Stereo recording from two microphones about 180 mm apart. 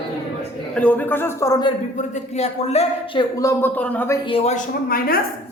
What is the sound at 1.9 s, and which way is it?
Speech, 40° left (ahead or behind).